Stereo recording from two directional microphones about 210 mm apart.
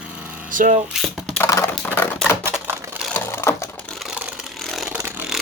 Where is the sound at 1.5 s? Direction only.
15° left (ahead or behind).